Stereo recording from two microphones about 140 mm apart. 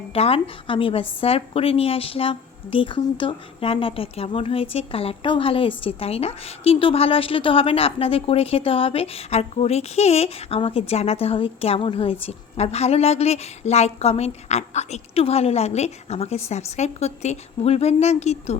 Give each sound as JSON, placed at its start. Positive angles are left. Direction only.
{"t": 0.1, "sound": "a woman's voice", "side_deg": 45}